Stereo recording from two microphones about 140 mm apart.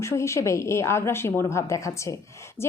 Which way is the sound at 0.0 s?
20° left (ahead or behind).